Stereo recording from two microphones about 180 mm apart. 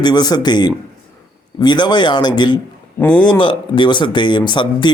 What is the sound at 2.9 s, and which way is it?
Speech, 10° left (ahead or behind).